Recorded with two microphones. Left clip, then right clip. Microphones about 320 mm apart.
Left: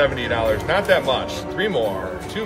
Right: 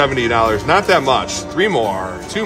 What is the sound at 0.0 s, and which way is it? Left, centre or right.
Speech, right.